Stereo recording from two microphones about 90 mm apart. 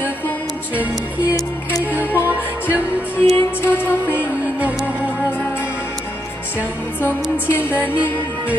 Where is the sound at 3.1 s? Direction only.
25° left (ahead or behind).